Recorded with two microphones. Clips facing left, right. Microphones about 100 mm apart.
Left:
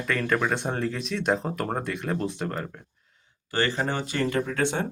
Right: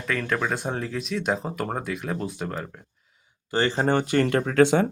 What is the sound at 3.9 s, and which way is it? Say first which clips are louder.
Speech: right 8 dB; 55° right (ahead or behind).